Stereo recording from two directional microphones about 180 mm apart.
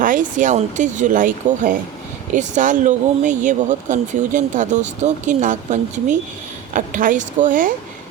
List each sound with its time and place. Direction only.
0.0 s speech: 45° right (ahead or behind)